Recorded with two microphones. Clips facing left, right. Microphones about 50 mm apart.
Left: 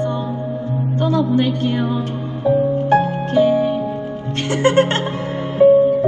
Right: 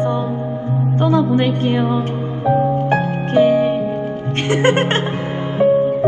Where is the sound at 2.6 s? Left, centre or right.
Right.